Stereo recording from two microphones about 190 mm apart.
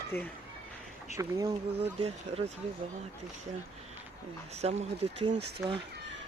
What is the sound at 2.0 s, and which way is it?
Speech, 30° right (ahead or behind).